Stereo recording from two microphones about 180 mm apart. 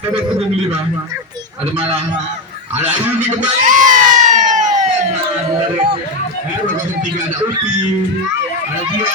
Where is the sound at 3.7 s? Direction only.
45° right (ahead or behind).